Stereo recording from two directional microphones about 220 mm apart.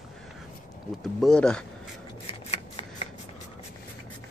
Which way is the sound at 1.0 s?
Centre (ahead or behind).